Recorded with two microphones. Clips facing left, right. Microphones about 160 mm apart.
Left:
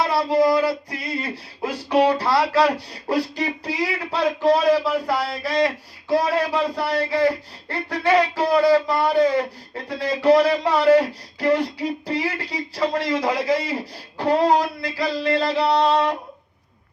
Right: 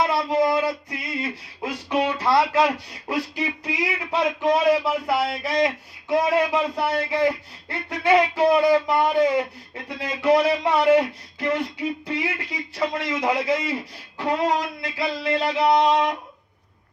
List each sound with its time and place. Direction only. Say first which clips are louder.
0.2 s a man's voice: left 3 dB; 30° left (ahead or behind)
8.4 s speech: left 1 dB; 20° right (ahead or behind)
9.0 s a man's voice: left 1 dB; 35° left (ahead or behind)
15.6 s a sound: right 2 dB; 10° right (ahead or behind)